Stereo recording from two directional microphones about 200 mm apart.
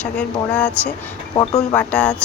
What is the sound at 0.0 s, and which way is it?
Speech, 5° left (ahead or behind).